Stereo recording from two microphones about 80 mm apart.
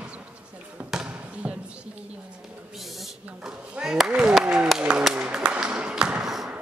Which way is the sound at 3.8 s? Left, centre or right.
Centre.